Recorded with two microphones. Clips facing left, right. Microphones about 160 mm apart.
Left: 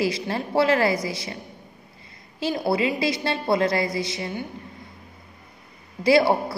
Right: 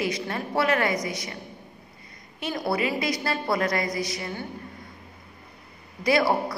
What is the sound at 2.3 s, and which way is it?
A woman's voice, 30° left (ahead or behind).